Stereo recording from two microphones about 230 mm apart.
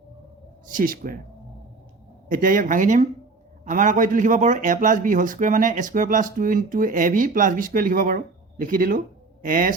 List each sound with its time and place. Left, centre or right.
0.7 s a man's voice: right
2.3 s a man's voice: right